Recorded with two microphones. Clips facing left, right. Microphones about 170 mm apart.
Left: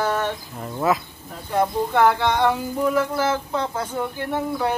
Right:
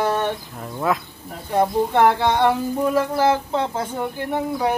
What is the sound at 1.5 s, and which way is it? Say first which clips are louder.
Speech: right 2 dB; 20° right (ahead or behind).